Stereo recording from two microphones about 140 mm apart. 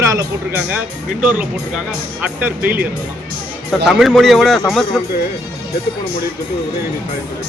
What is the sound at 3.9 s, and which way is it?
Speech, centre (ahead or behind).